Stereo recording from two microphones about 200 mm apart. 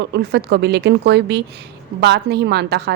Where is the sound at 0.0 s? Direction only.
55° right (ahead or behind).